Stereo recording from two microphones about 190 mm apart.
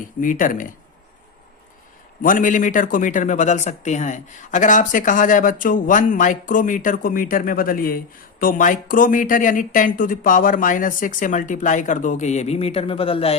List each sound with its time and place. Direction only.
0.2 s speech: 45° left (ahead or behind)
2.2 s speech: 45° left (ahead or behind)